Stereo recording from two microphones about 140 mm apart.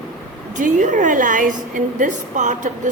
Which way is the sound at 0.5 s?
60° right (ahead or behind).